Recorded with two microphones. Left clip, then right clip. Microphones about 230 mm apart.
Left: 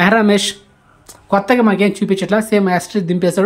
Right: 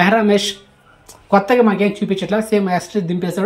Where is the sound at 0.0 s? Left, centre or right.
Centre.